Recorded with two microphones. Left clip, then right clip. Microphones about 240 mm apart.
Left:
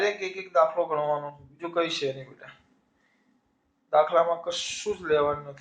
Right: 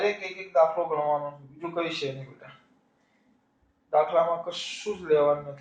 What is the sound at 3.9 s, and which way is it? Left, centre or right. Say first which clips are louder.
Speech: left 1 dB; left.